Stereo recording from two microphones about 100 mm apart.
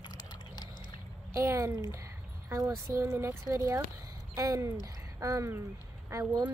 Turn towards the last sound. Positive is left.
turn(degrees=-30)  # may be behind; listen again after turning